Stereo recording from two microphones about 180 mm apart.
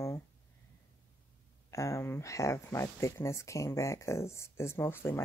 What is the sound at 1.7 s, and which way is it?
Speech, 15° left (ahead or behind).